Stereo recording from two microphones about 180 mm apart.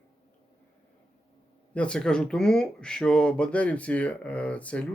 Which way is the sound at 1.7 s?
5° left (ahead or behind).